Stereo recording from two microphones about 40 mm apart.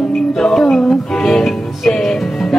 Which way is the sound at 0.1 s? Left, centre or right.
Centre.